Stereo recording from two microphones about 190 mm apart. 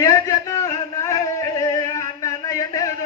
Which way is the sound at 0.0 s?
15° left (ahead or behind).